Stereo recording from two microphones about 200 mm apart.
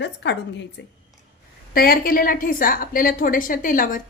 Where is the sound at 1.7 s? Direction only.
50° left (ahead or behind).